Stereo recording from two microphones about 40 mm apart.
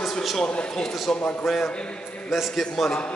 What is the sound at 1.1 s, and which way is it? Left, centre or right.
Speech, centre.